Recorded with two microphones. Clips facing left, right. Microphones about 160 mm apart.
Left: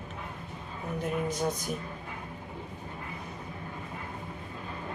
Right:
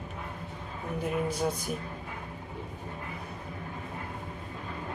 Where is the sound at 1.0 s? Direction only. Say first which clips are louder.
Right 1 dB; 10° right (ahead or behind).